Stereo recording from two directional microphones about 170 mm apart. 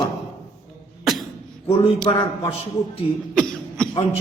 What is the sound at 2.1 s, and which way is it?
Speech, 35° left (ahead or behind).